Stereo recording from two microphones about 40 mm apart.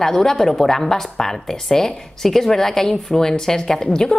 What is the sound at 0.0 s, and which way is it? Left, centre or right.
A woman's voice, centre.